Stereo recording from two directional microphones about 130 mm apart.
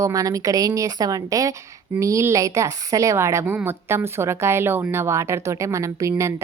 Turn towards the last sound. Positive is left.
turn(degrees=-20)  # may be behind; listen again after turning